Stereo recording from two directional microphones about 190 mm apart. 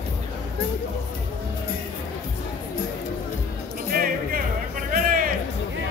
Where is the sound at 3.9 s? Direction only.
50° right (ahead or behind).